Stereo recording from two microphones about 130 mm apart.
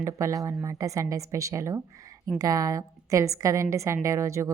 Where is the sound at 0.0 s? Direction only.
25° right (ahead or behind).